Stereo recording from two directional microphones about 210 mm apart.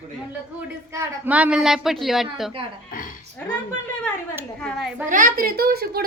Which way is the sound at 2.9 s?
40° left (ahead or behind).